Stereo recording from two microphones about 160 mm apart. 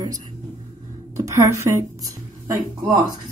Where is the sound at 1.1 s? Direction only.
20° right (ahead or behind).